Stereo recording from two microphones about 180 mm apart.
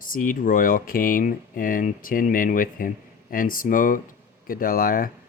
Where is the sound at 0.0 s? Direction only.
50° left (ahead or behind).